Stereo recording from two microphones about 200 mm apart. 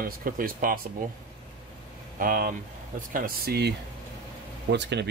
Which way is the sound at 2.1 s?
45° right (ahead or behind).